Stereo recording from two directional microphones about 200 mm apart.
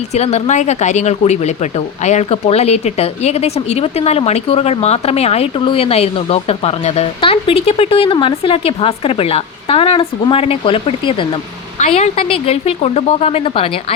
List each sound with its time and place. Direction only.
0.1 s speech: 35° left (ahead or behind)